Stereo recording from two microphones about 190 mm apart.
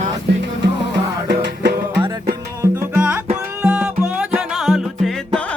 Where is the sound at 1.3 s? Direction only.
65° right (ahead or behind).